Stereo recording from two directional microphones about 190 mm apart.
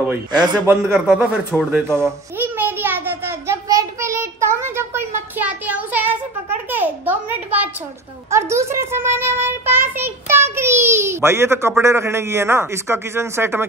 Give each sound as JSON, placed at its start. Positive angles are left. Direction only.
{"t": 0.3, "sound": "a man's voice", "side_deg": -20}
{"t": 0.7, "sound": "a man's voice", "side_deg": -5}
{"t": 2.0, "sound": "a sound", "side_deg": -10}
{"t": 8.3, "sound": "a child's voice", "side_deg": -15}